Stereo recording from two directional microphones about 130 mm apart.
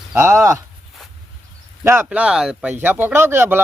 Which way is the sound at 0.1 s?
20° right (ahead or behind).